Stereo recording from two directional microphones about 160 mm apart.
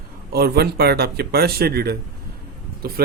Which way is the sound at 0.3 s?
80° right.